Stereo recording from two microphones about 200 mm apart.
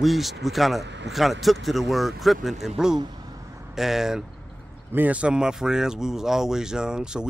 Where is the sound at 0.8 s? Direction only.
60° right (ahead or behind).